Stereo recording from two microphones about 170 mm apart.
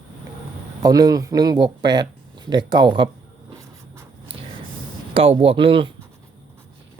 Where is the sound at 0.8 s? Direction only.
20° right (ahead or behind).